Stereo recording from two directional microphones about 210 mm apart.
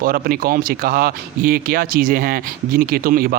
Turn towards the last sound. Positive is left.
turn(degrees=-45)  # may be behind; listen again after turning